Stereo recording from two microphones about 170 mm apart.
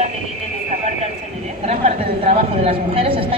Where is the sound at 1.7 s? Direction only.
40° right (ahead or behind).